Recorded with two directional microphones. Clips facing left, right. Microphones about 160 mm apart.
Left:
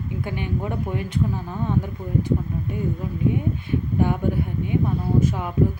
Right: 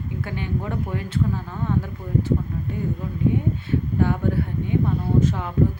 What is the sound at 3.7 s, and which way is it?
Speech, 15° left (ahead or behind).